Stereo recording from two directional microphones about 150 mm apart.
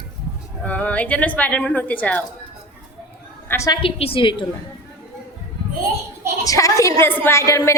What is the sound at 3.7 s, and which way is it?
Speech, 40° left (ahead or behind).